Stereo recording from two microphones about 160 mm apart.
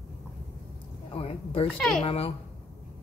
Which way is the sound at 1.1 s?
35° left (ahead or behind).